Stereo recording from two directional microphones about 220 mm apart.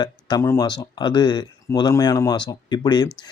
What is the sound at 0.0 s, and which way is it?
Speech, 20° left (ahead or behind).